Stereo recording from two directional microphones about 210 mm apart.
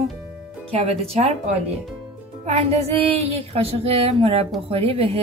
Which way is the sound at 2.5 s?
30° right (ahead or behind).